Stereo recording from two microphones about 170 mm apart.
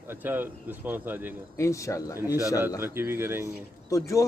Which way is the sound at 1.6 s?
20° left (ahead or behind).